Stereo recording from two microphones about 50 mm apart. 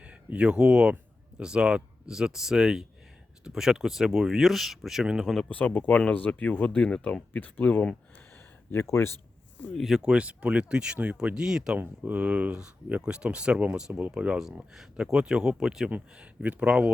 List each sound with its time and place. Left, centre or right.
0.0 s speech: right; by 5.0 s centre
5.2 s speech: centre
5.5 s speech: left
8.3 s a sound: left
9.7 s speech: centre
10.0 s speech: right
11.3 s speech: centre
11.8 s speech: right
12.5 s speech: centre
16.1 s speech: right